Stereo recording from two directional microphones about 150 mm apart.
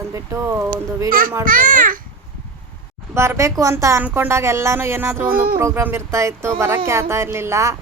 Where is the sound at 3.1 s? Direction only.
15° right (ahead or behind).